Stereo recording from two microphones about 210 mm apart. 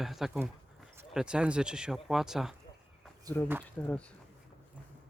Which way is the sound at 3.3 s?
20° right (ahead or behind).